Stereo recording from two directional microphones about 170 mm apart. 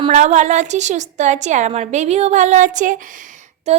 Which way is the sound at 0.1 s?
45° right (ahead or behind).